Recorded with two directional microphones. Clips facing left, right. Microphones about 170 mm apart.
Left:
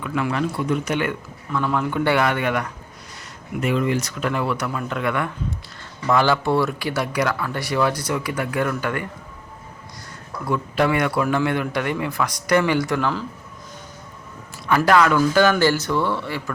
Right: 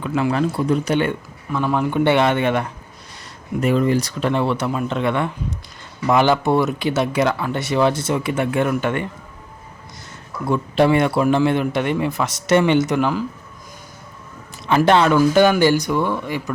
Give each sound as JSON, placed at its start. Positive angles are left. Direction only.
{"t": 0.0, "sound": "speech", "side_deg": -30}
{"t": 1.5, "sound": "speech", "side_deg": -20}
{"t": 3.6, "sound": "speech", "side_deg": -35}
{"t": 10.4, "sound": "speech", "side_deg": -25}
{"t": 14.8, "sound": "speech", "side_deg": -25}